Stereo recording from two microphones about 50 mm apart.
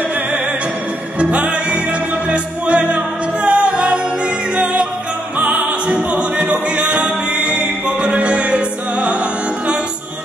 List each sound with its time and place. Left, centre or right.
1.2 s music: right
5.4 s music: right